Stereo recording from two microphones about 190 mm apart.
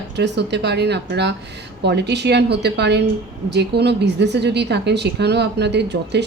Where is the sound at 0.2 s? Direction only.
65° right (ahead or behind).